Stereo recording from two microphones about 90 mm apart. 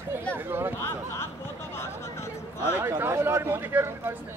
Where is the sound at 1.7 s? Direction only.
30° left (ahead or behind).